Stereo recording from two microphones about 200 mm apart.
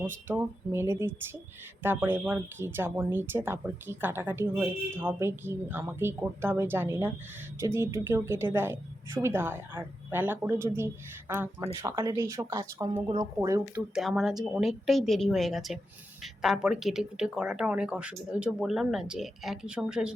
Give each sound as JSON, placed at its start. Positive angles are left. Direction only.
{"t": 0.0, "sound": "speech", "side_deg": -10}
{"t": 13.7, "sound": "speech", "side_deg": -5}